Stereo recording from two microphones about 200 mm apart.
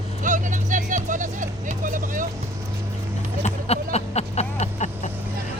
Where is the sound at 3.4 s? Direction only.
30° left (ahead or behind).